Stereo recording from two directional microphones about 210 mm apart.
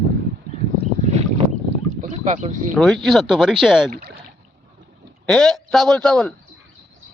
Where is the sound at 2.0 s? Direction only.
35° right (ahead or behind).